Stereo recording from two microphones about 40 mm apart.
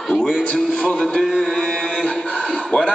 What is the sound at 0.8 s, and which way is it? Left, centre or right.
Speech, left.